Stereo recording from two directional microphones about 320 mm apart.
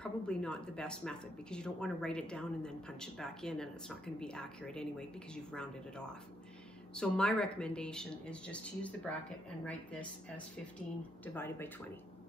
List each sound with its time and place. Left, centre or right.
0.0 s speech: centre